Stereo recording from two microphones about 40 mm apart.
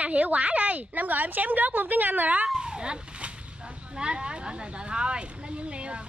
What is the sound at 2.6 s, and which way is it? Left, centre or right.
Cat, right.